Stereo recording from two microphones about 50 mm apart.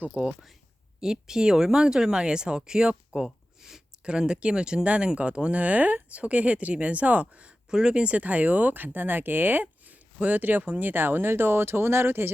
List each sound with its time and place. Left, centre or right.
0.1 s speech: centre
3.1 s a sound: centre
4.0 s speech: centre; by 12.3 s right